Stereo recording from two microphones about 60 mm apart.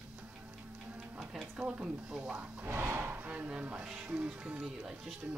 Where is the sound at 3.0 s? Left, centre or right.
Right; by 5.1 s centre.